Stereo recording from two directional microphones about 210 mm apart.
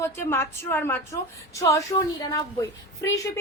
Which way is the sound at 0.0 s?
10° left (ahead or behind).